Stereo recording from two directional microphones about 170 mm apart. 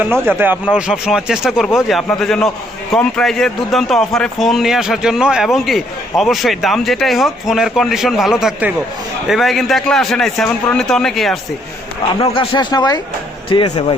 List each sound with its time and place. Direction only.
0.0 s a man's voice: 15° right (ahead or behind)
12.2 s speech: 30° left (ahead or behind)